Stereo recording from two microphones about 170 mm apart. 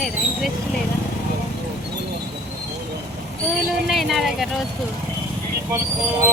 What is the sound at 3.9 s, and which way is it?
Speech, centre (ahead or behind).